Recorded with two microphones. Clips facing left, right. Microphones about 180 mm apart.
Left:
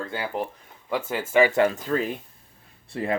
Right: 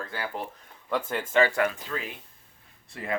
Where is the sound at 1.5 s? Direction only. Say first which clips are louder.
Left 5 dB; 25° left (ahead or behind).